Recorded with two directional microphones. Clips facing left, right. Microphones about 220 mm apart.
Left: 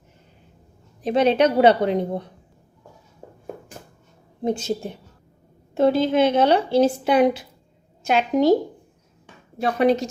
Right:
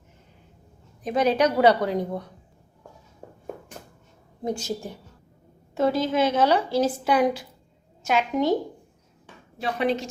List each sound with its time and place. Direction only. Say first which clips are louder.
1.0 s a woman's voice: left 4 dB; 25° left (ahead or behind)
4.4 s a woman's voice: left 5 dB; 20° left (ahead or behind)
9.6 s a woman's voice: left 6 dB; 45° left (ahead or behind)